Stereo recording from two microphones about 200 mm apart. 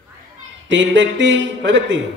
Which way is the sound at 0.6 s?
65° right (ahead or behind).